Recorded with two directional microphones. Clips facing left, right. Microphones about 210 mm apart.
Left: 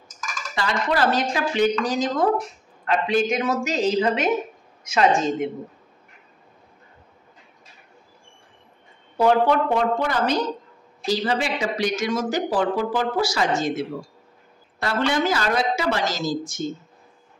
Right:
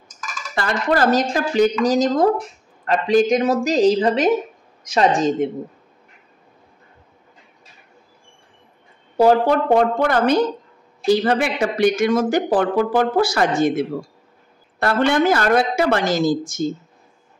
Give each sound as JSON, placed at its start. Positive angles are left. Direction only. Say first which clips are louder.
{"t": 0.6, "sound": "speech", "louder": "right 4 dB", "side_deg": -50}
{"t": 9.1, "sound": "speech", "louder": "right 4 dB", "side_deg": -40}